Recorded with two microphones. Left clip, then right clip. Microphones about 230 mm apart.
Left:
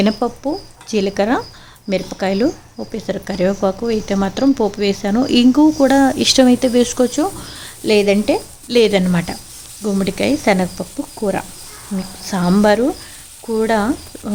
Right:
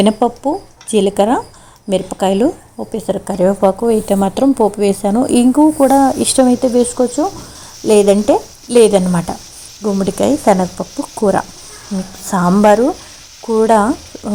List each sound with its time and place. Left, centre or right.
0.0 s speech: centre
12.3 s speech: centre